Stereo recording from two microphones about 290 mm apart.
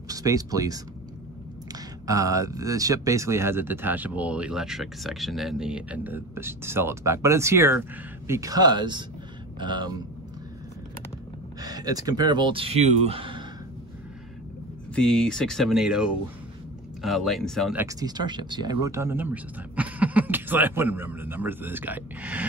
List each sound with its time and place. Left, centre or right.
0.1 s speech: centre
11.6 s speech: centre
15.0 s speech: centre
17.8 s speech: centre